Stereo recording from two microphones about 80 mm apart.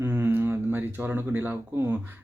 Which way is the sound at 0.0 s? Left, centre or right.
Right.